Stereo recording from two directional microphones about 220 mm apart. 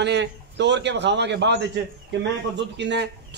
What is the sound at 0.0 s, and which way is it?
A man's voice, 50° right (ahead or behind).